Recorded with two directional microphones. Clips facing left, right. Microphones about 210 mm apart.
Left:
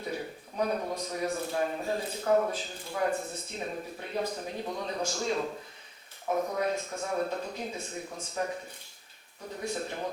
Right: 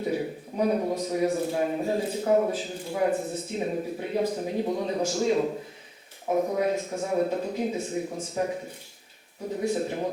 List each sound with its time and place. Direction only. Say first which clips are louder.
0.0 s a sound: right 8 dB; 5° right (ahead or behind)
0.6 s a man's voice: right 6 dB; 10° right (ahead or behind)
6.2 s speech: right 5 dB; 20° right (ahead or behind)
6.6 s a man's voice: right 5 dB; 5° right (ahead or behind)